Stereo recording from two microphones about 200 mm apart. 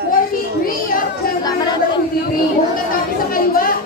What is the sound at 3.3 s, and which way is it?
Chatter, 45° left (ahead or behind).